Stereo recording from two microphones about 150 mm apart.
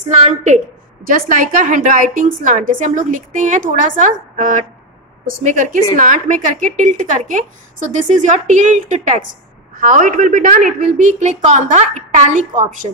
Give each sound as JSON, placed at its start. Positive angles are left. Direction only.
{"t": 0.1, "sound": "a woman's voice", "side_deg": -50}
{"t": 1.0, "sound": "a woman's voice", "side_deg": -65}